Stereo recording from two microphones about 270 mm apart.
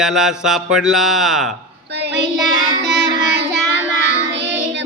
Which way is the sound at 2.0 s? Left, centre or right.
Right.